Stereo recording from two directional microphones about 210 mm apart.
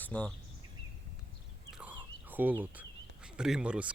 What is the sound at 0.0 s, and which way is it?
Speech, 5° left (ahead or behind).